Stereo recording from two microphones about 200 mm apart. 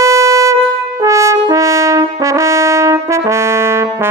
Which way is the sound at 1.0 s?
15° right (ahead or behind).